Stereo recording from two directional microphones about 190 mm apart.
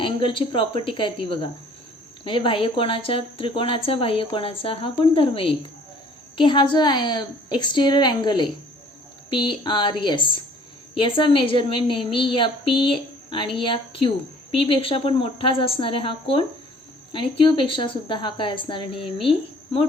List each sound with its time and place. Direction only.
0.0 s a woman's voice: 25° left (ahead or behind)